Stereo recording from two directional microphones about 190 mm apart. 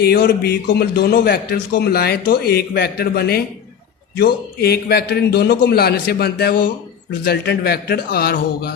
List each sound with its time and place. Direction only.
0.0 s a man's voice: 55° left (ahead or behind)